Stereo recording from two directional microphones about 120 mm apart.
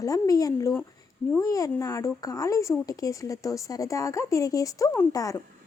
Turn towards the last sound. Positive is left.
turn(degrees=30)  # may be behind; listen again after turning